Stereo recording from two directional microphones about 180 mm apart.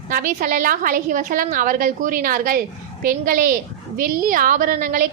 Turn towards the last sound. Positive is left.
turn(degrees=-50)  # may be behind; listen again after turning